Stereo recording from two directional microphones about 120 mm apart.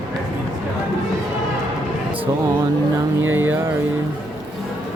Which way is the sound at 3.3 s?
15° right (ahead or behind).